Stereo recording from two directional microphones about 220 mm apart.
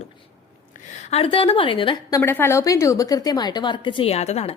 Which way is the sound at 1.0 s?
25° left (ahead or behind).